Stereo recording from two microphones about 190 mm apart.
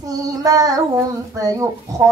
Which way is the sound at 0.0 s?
20° right (ahead or behind).